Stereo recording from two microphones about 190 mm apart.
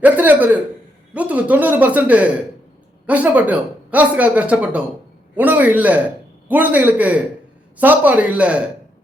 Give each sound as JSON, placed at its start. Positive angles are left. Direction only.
{"t": 0.0, "sound": "speech", "side_deg": -10}